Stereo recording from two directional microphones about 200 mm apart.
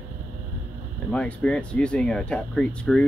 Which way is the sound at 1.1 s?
5° left (ahead or behind).